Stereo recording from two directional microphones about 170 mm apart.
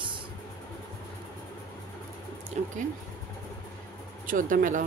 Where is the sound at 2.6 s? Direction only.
45° right (ahead or behind).